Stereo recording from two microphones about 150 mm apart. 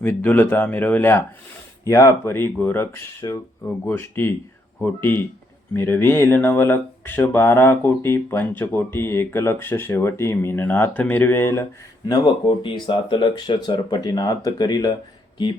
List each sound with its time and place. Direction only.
0.0 s speech: 10° left (ahead or behind)
12.0 s speech: 30° left (ahead or behind)